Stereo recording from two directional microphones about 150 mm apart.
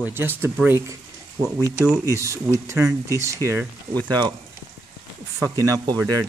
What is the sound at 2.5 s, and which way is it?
Speech, 20° right (ahead or behind).